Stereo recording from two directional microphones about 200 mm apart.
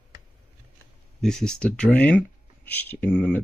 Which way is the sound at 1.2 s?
5° left (ahead or behind).